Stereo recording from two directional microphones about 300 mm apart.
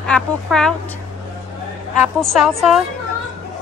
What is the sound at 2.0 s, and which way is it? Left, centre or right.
Speech, centre.